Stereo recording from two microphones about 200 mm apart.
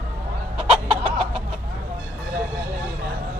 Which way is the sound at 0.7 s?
30° right (ahead or behind).